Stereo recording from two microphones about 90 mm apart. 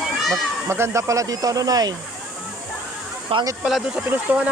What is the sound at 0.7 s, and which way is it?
Speech, 30° right (ahead or behind).